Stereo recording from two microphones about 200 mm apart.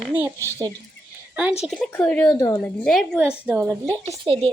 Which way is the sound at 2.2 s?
15° left (ahead or behind).